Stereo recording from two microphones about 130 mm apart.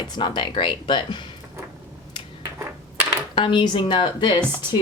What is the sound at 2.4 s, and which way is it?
Coin, 20° right (ahead or behind).